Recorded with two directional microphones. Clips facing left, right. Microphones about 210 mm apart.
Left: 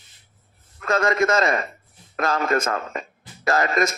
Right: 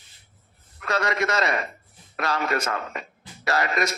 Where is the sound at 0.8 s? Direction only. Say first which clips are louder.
Left 5 dB; 45° left (ahead or behind).